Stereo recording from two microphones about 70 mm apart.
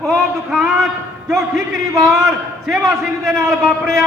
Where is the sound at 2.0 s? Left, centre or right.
Centre.